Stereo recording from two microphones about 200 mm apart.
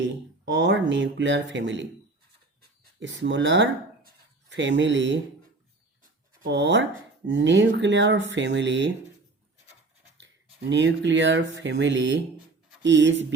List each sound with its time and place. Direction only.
0.0 s speech: 60° right (ahead or behind)
3.0 s speech: 65° right (ahead or behind)
6.0 s a sound: 55° right (ahead or behind)
7.3 s speech: 65° right (ahead or behind)
10.2 s speech: 65° right (ahead or behind)